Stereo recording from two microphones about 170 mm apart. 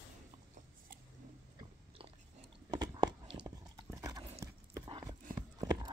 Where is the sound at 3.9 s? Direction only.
20° right (ahead or behind).